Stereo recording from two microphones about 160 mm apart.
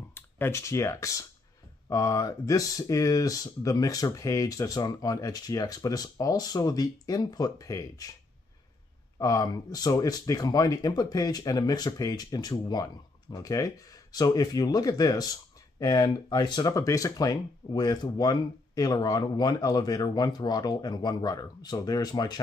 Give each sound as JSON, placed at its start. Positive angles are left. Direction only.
{"t": 0.1, "sound": "speech", "side_deg": 15}
{"t": 9.2, "sound": "speech", "side_deg": 25}